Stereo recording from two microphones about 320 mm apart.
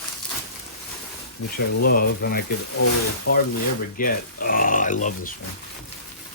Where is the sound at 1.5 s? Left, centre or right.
Left.